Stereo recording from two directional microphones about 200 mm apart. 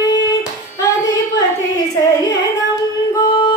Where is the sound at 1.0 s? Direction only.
20° left (ahead or behind).